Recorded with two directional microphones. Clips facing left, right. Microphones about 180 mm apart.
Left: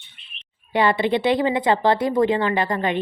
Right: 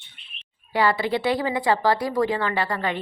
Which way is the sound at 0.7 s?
20° left (ahead or behind).